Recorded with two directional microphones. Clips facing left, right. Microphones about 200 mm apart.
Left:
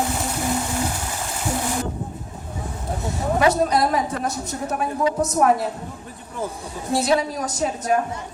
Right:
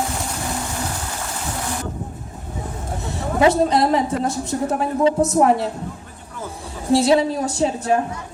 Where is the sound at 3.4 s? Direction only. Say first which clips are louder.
Right 4 dB; 25° right (ahead or behind).